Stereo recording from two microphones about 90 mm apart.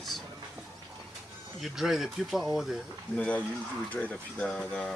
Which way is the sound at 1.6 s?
5° right (ahead or behind).